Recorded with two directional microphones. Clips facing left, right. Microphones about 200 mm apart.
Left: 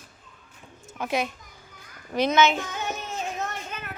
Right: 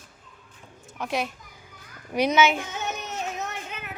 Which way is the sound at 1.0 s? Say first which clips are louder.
Left 1 dB; centre (ahead or behind).